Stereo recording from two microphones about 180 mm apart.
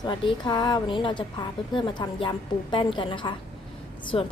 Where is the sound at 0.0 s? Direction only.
25° left (ahead or behind).